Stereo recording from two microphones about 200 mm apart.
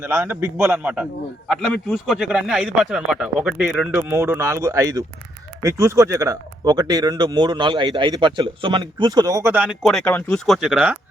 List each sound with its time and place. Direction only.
0.0 s a man's voice: 10° right (ahead or behind)